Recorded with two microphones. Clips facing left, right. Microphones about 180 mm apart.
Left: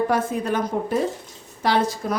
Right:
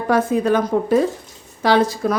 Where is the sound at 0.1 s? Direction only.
90° right.